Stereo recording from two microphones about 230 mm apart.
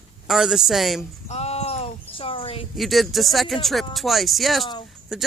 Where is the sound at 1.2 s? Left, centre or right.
Left.